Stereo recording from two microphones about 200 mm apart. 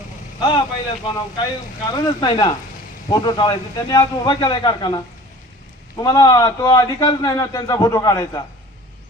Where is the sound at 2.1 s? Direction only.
20° left (ahead or behind).